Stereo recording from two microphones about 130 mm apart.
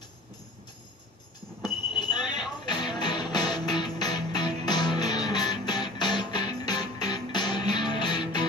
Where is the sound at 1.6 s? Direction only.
35° left (ahead or behind).